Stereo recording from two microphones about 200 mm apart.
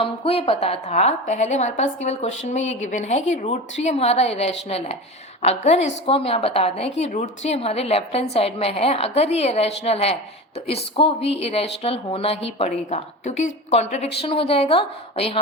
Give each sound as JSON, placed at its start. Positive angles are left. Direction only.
{"t": 0.0, "sound": "a woman's voice", "side_deg": 30}